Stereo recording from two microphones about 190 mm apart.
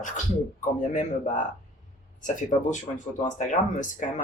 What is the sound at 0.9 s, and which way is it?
Speech, 40° left (ahead or behind).